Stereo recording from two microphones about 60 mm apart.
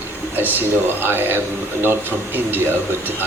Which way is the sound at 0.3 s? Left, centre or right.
Right.